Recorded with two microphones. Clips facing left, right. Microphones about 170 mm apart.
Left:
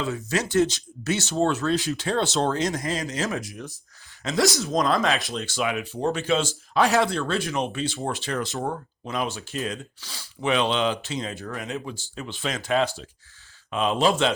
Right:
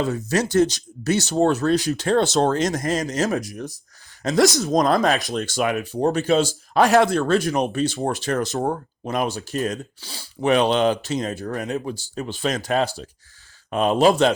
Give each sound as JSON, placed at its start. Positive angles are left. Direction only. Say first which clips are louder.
{"t": 0.0, "sound": "speech", "louder": "right 5 dB", "side_deg": -40}
{"t": 10.4, "sound": "speech", "louder": "right 5 dB", "side_deg": -45}